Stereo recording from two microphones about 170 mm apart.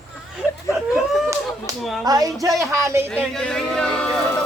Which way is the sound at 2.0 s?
20° right (ahead or behind).